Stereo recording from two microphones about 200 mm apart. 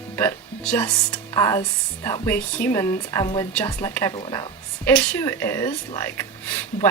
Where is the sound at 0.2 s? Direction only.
10° left (ahead or behind).